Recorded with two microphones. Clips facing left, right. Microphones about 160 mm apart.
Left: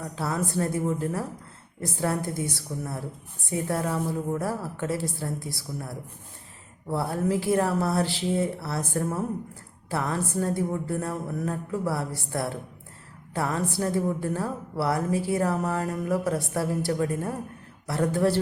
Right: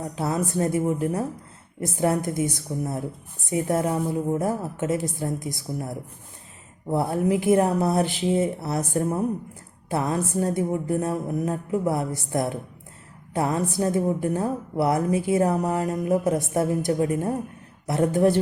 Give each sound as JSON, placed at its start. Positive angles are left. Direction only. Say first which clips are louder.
{"t": 0.0, "sound": "a woman's voice", "louder": "right 3 dB", "side_deg": -20}